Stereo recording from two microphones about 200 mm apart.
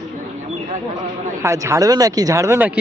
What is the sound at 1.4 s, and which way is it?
Speech, 15° right (ahead or behind).